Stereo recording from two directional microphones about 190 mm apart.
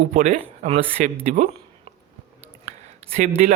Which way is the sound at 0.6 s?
35° right (ahead or behind).